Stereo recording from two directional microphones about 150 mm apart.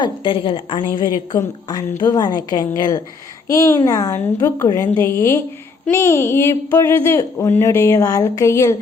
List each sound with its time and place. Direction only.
0.0 s a woman's voice: 35° left (ahead or behind)